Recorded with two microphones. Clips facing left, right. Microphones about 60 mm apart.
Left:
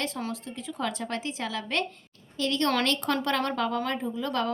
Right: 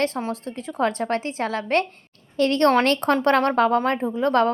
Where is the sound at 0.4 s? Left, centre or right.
Right.